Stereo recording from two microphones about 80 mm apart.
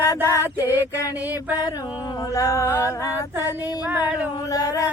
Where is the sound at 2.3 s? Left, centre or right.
Left.